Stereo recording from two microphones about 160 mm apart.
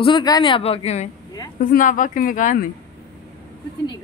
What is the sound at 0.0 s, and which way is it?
Speech, 25° left (ahead or behind).